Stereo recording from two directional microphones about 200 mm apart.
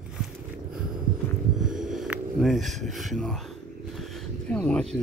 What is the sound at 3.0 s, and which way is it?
Speech, centre (ahead or behind).